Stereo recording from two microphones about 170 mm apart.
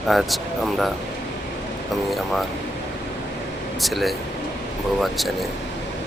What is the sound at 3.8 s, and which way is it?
Speech, centre (ahead or behind).